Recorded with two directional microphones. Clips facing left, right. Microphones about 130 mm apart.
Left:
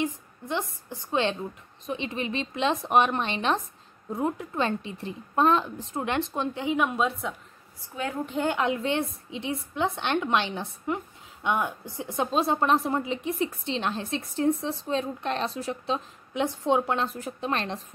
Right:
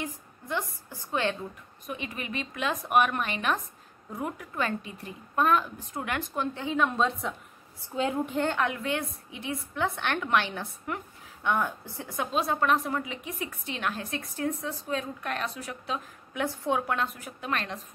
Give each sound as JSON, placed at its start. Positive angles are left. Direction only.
{"t": 0.0, "sound": "a woman's voice", "side_deg": 20}
{"t": 7.9, "sound": "a woman's voice", "side_deg": -20}
{"t": 8.5, "sound": "a woman's voice", "side_deg": 20}